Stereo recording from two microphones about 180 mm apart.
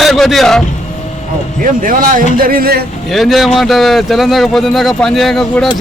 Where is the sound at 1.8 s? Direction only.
50° right (ahead or behind).